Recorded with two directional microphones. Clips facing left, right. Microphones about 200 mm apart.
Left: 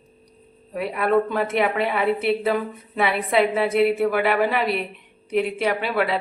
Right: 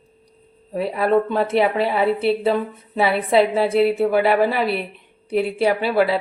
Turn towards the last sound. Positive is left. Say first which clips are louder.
# right 4 dB
turn(degrees=-30)  # may be behind; listen again after turning